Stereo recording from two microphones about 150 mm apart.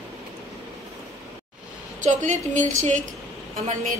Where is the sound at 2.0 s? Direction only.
55° right (ahead or behind).